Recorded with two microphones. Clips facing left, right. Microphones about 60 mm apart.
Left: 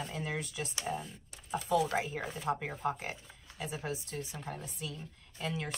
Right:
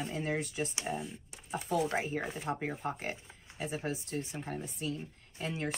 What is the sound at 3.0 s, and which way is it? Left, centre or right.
Speech, right.